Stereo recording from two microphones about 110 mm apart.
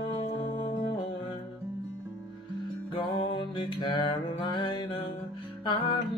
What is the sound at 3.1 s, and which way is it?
Music, 45° left (ahead or behind).